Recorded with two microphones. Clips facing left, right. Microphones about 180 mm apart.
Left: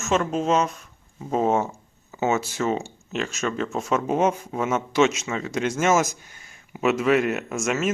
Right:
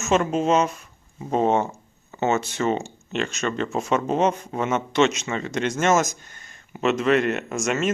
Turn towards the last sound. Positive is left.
turn(degrees=5)  # may be behind; listen again after turning